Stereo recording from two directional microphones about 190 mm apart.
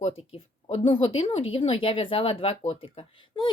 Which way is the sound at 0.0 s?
30° left (ahead or behind).